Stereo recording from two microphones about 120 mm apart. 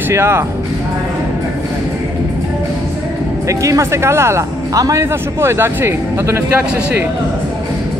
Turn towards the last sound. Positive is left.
turn(degrees=-20)  # may be behind; listen again after turning